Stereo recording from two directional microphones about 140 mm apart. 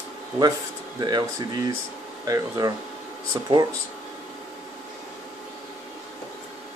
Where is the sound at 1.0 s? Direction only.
30° right (ahead or behind).